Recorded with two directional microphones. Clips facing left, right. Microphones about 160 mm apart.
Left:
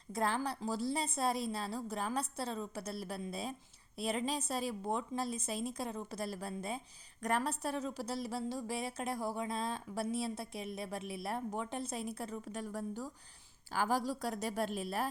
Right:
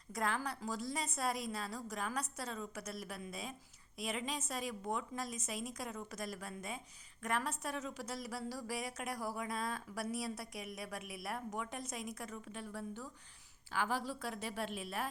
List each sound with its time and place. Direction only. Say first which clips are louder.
0.1 s a woman's voice: left 3 dB; 30° left (ahead or behind)